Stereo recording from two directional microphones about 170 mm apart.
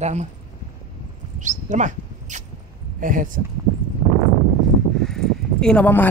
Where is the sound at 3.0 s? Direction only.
50° right (ahead or behind).